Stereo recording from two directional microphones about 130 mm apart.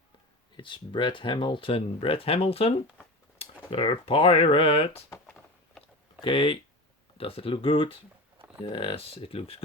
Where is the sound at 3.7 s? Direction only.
45° left (ahead or behind).